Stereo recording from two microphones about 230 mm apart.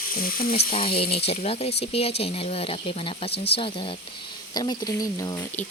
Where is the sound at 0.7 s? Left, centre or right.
Left.